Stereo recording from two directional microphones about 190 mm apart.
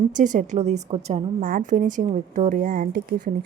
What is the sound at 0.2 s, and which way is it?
A woman's voice, 40° right (ahead or behind).